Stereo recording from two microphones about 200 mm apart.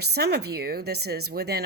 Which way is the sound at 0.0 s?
55° right (ahead or behind).